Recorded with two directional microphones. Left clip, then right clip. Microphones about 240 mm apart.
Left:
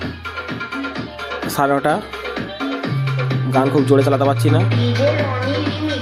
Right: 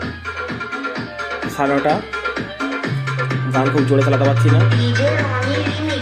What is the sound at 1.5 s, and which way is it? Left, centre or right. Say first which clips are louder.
Speech: left 1 dB; left.